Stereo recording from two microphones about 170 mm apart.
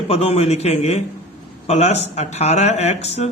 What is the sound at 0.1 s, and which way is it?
Speech, 35° left (ahead or behind).